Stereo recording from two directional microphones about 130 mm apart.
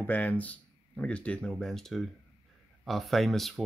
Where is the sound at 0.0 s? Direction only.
10° left (ahead or behind).